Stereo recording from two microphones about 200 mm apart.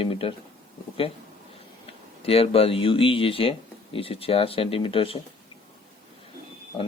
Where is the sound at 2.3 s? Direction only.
30° left (ahead or behind).